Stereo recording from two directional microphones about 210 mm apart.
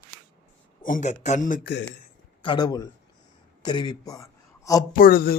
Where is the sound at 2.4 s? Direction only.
20° left (ahead or behind).